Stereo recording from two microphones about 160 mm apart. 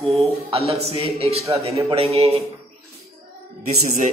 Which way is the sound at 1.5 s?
20° right (ahead or behind).